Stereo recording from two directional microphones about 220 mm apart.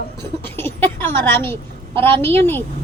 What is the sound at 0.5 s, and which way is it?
A woman's voice, 10° left (ahead or behind).